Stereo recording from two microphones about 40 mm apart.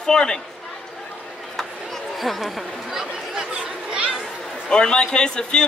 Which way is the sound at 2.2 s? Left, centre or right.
Centre.